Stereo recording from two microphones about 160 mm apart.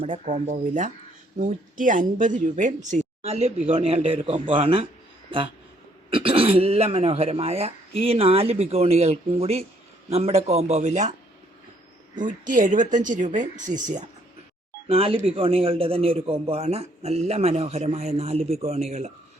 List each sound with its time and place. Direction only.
0.0 s a man's voice: 50° right (ahead or behind)
12.1 s speech: 55° right (ahead or behind)
14.8 s a man's voice: 40° right (ahead or behind)